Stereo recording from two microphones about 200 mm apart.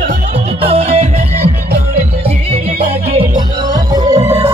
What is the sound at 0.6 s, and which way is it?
Music, 30° right (ahead or behind).